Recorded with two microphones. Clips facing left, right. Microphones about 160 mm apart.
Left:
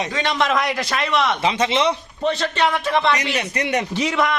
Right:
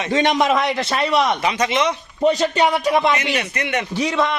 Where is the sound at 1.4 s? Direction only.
25° left (ahead or behind).